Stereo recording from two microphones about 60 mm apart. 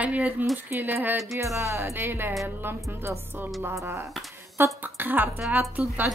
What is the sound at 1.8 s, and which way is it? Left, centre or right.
A woman's voice, right.